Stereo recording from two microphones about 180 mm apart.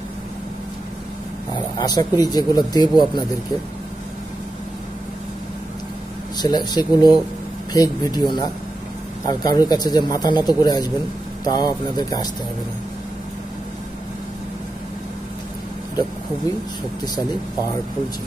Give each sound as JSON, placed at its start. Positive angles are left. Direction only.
{"t": 1.5, "sound": "speech", "side_deg": 25}
{"t": 6.3, "sound": "speech", "side_deg": 25}